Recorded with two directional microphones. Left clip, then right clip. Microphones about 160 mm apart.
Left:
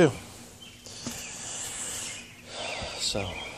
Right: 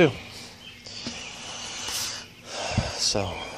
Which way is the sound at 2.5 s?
25° right (ahead or behind).